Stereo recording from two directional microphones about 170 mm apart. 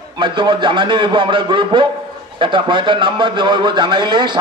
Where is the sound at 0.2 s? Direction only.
30° right (ahead or behind).